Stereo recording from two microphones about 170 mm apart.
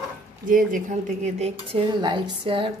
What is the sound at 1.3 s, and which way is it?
Speech, 40° right (ahead or behind).